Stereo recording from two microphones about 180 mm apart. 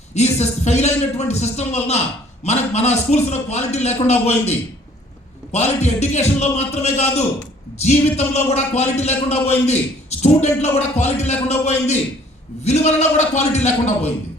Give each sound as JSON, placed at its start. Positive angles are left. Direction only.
{"t": 0.1, "sound": "a man's voice", "side_deg": 40}